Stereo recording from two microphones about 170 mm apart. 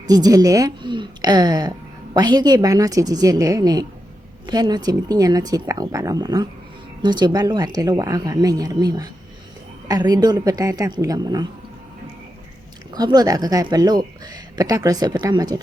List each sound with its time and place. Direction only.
0.1 s a woman's voice: 20° right (ahead or behind)
12.9 s speech: 25° right (ahead or behind)